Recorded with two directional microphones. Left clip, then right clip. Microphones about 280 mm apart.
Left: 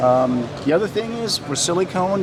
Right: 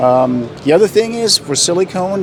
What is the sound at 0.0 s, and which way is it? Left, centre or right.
Speech, right.